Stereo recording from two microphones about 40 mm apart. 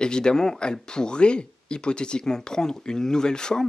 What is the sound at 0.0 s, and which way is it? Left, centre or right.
Speech, centre.